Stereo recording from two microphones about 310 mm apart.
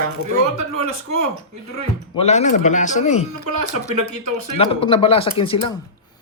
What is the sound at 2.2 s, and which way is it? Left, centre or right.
A man's voice, left.